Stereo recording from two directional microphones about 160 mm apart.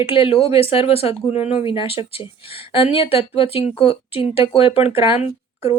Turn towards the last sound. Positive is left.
turn(degrees=40)  # may be behind; listen again after turning